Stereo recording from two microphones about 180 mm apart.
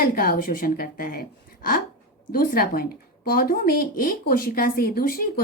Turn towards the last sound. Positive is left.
turn(degrees=55)  # may be behind; listen again after turning